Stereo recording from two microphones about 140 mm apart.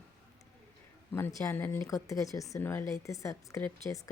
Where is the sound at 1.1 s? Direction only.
20° left (ahead or behind).